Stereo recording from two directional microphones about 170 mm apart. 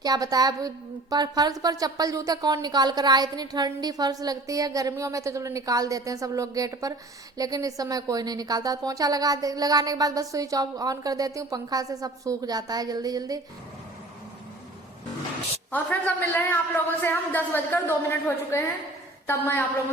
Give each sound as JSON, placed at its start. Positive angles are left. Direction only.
{"t": 0.0, "sound": "a woman's voice", "side_deg": -20}
{"t": 15.7, "sound": "a man's voice", "side_deg": 10}